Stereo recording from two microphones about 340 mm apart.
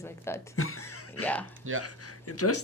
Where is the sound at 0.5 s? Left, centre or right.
Left.